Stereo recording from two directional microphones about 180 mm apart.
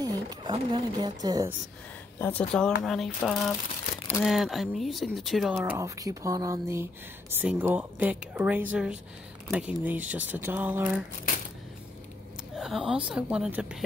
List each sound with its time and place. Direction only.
0.0 s speech: 20° right (ahead or behind)
2.1 s speech: 10° left (ahead or behind)
5.5 s speech: 15° right (ahead or behind)
12.5 s speech: centre (ahead or behind)